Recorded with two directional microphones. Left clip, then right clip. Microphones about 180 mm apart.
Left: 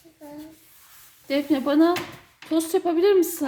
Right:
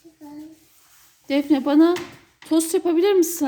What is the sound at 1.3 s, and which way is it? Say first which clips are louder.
Speech: right 3 dB; 30° right (ahead or behind).